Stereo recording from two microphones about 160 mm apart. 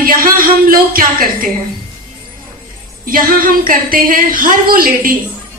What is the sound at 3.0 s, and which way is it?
A woman's voice, 60° right (ahead or behind).